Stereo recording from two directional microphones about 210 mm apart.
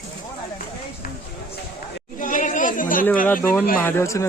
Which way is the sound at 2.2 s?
40° left (ahead or behind).